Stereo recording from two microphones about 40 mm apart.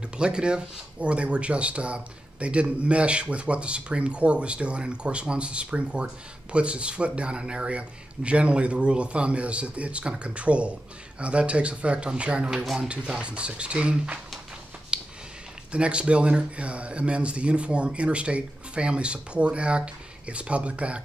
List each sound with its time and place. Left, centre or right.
0.2 s speech: right
14.9 s a sound: right
15.7 s speech: right